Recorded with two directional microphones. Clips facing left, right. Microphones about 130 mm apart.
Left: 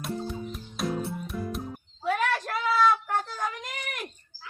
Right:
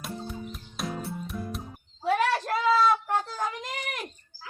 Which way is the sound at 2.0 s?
35° right (ahead or behind).